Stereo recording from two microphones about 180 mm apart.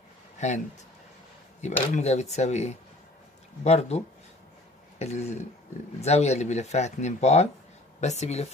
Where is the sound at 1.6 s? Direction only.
40° left (ahead or behind).